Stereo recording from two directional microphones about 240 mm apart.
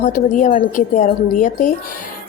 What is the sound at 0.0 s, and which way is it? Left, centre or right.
A woman's voice, left.